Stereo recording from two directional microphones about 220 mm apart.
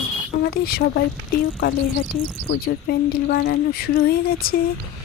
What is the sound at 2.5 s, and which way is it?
Speech, 45° left (ahead or behind).